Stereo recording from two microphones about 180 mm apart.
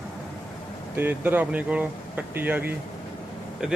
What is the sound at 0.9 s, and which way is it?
Speech, 10° right (ahead or behind).